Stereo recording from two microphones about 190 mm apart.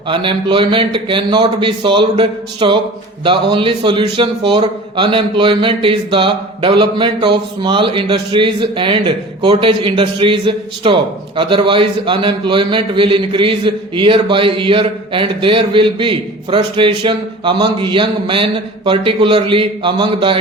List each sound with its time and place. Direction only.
0.1 s a man's voice: 25° right (ahead or behind)